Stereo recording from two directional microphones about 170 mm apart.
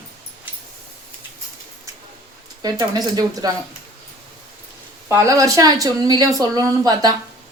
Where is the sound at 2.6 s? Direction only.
25° right (ahead or behind).